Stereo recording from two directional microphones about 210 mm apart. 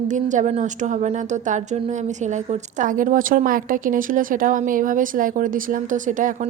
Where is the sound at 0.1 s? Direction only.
35° right (ahead or behind).